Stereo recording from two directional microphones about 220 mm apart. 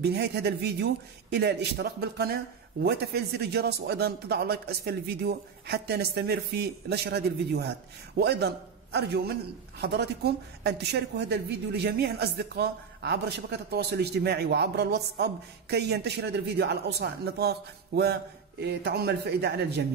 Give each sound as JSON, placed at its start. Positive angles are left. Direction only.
{"t": 0.0, "sound": "a man's voice", "side_deg": -50}